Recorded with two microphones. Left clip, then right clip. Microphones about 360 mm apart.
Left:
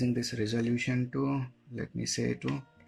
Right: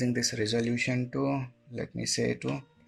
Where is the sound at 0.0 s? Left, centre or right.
Centre.